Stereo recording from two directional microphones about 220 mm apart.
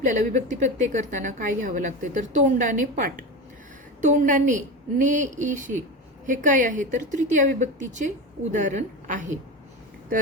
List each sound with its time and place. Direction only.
0.0 s a woman's voice: 35° right (ahead or behind)